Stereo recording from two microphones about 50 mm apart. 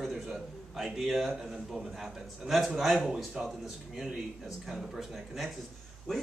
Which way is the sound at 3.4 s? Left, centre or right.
Centre.